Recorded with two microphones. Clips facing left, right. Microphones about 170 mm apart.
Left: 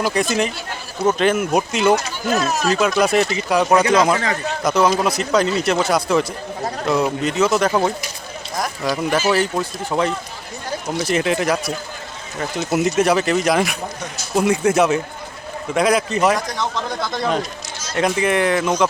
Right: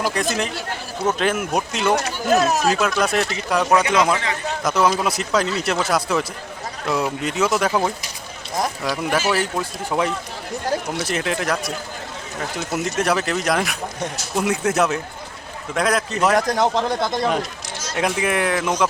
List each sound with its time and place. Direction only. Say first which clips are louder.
0.0 s speech: left 3 dB; centre (ahead or behind)
2.2 s speech: right 2 dB; 50° right (ahead or behind)
2.6 s speech: left 3 dB; centre (ahead or behind)
16.3 s speech: right 4 dB; 50° right (ahead or behind)
16.7 s speech: right 4 dB; 35° right (ahead or behind)
17.1 s speech: even; 10° right (ahead or behind)